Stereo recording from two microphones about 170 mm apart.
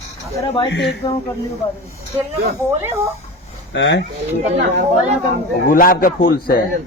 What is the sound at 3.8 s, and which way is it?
Speech, 90° left.